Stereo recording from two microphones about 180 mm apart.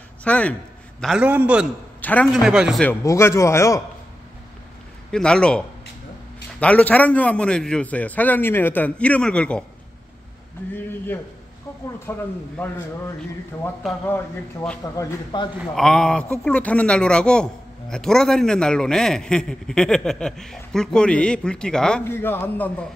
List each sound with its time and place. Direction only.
0.2 s a man's voice: 10° left (ahead or behind)
1.0 s a man's voice: 5° right (ahead or behind)
2.0 s a sound: 10° left (ahead or behind)
2.4 s a man's voice: 5° right (ahead or behind)
2.8 s a man's voice: 15° left (ahead or behind)
5.1 s a man's voice: 5° left (ahead or behind)
12.1 s a man's voice: 15° left (ahead or behind)
14.0 s a man's voice: 10° left (ahead or behind)
14.8 s speech: 20° left (ahead or behind)
15.7 s a man's voice: 5° left (ahead or behind)